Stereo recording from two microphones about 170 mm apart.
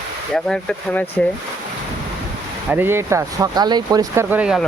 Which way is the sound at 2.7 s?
15° right (ahead or behind).